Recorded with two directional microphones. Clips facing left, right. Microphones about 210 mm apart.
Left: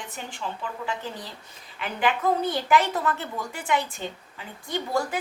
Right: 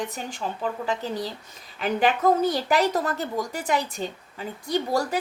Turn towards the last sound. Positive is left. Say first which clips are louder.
# right 3 dB
turn(degrees=-40)  # may be behind; listen again after turning